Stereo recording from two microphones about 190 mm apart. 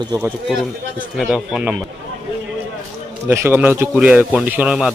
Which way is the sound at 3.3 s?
10° right (ahead or behind).